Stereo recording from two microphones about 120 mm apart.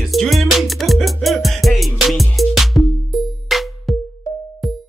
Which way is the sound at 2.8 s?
30° left (ahead or behind).